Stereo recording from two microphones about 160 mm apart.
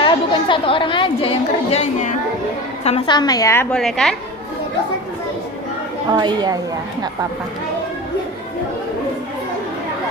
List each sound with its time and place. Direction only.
0.0 s a woman's voice: 30° left (ahead or behind)
3.1 s a woman's voice: 25° left (ahead or behind)
3.8 s a woman's voice: 5° left (ahead or behind)
6.1 s a woman's voice: 25° right (ahead or behind)